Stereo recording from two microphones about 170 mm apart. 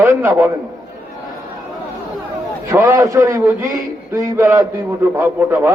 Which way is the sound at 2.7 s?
15° right (ahead or behind).